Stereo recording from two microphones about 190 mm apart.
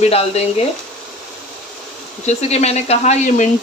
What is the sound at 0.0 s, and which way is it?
Speech, 30° left (ahead or behind).